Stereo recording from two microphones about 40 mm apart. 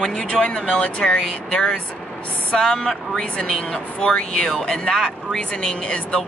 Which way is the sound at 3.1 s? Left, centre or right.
Left.